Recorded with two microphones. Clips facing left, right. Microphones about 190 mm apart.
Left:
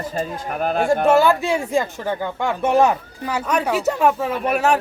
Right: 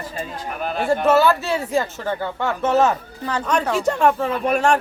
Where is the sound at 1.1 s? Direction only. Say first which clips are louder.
Even; 15° left (ahead or behind).